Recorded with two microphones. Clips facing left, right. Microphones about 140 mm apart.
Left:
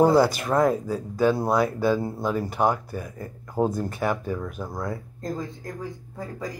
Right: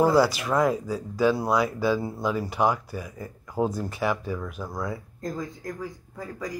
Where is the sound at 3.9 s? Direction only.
50° left (ahead or behind).